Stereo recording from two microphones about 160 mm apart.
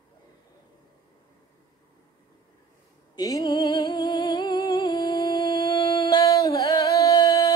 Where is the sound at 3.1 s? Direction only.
20° left (ahead or behind).